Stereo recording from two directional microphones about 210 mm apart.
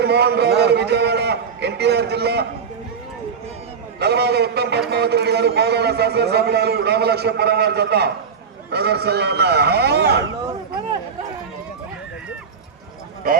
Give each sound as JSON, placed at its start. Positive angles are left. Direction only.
{"t": 0.0, "sound": "a sound", "side_deg": -50}
{"t": 4.0, "sound": "a man's voice", "side_deg": -50}
{"t": 13.2, "sound": "a man's voice", "side_deg": -45}